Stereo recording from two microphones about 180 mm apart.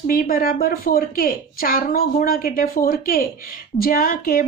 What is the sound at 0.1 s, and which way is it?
A woman's voice, 55° left (ahead or behind).